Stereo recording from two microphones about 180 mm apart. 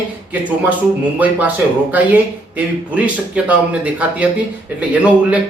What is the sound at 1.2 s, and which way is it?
Speech, 10° right (ahead or behind).